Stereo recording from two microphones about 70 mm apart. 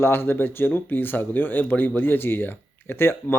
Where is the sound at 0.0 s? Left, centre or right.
Left.